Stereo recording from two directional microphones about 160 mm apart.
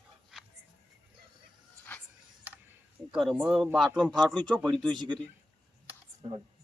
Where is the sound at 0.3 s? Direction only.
5° right (ahead or behind).